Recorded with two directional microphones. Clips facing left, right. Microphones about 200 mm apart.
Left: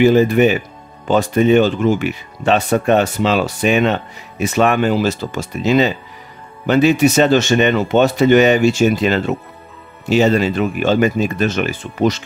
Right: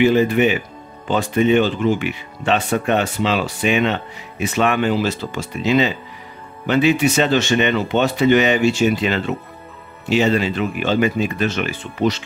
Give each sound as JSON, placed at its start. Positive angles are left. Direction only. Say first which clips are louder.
{"t": 0.0, "sound": "speech", "louder": "left 3 dB", "side_deg": 40}